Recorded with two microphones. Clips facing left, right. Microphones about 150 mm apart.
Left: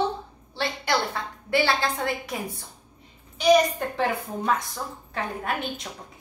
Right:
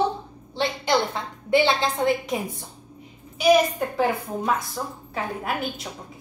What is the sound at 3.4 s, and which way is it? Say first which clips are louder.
A woman's voice: right 1 dB; 5° right (ahead or behind).